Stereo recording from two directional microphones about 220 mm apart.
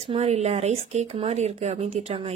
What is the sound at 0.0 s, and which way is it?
Speech, 30° right (ahead or behind).